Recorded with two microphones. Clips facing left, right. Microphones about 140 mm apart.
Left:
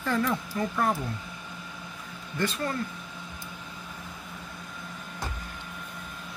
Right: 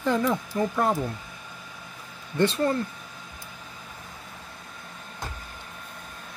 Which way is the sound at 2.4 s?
25° right (ahead or behind).